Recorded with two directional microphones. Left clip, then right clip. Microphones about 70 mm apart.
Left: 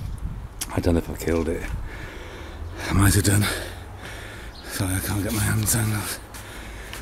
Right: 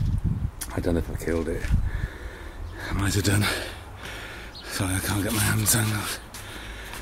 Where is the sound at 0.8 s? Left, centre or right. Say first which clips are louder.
Left 3 dB; centre.